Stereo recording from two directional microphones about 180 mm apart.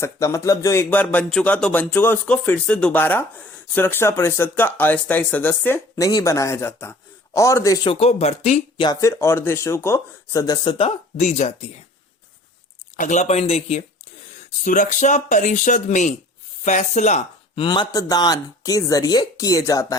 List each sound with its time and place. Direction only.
0.0 s speech: 15° left (ahead or behind)
7.9 s speech: 35° left (ahead or behind)
8.9 s speech: 15° left (ahead or behind); by 11.5 s 40° left (ahead or behind)
13.0 s a man's voice: 40° left (ahead or behind); by 20.0 s 20° left (ahead or behind)